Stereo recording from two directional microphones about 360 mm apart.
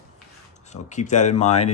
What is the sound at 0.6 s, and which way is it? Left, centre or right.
Speech, centre.